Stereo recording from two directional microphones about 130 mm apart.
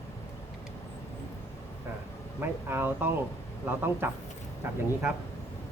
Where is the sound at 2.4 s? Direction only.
15° right (ahead or behind).